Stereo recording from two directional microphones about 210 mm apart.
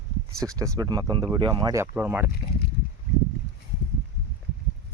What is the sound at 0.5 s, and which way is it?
Speech, 15° right (ahead or behind).